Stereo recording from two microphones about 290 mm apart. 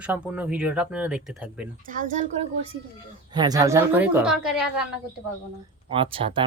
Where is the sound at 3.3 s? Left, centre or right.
Centre.